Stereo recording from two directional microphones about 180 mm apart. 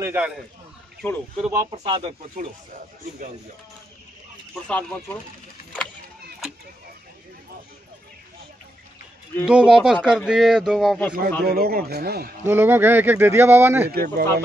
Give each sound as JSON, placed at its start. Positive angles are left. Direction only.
{"t": 0.0, "sound": "speech", "side_deg": -10}
{"t": 1.0, "sound": "speech", "side_deg": 10}
{"t": 1.4, "sound": "speech", "side_deg": -10}
{"t": 1.7, "sound": "speech", "side_deg": -30}
{"t": 4.6, "sound": "speech", "side_deg": 5}
{"t": 9.5, "sound": "a man's voice", "side_deg": -5}
{"t": 11.4, "sound": "a man's voice", "side_deg": -60}
{"t": 12.4, "sound": "speech", "side_deg": -10}
{"t": 13.8, "sound": "a man's voice", "side_deg": -60}